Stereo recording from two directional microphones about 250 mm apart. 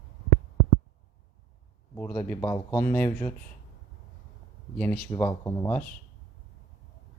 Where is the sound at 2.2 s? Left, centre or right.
Centre.